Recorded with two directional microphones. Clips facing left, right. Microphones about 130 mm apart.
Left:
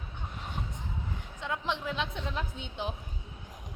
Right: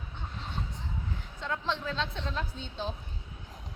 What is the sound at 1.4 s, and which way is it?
A woman's voice, 15° left (ahead or behind).